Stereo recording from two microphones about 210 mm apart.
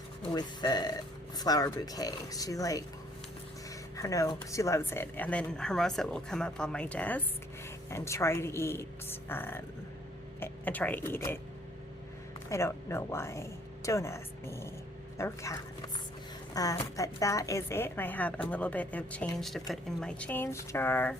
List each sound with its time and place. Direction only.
0.3 s a woman's voice: 20° left (ahead or behind)
3.9 s a woman's voice: 15° left (ahead or behind)
12.5 s a woman's voice: 10° left (ahead or behind)